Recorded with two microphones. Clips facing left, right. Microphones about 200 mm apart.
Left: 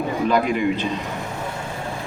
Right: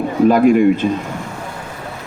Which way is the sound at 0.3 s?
50° right (ahead or behind).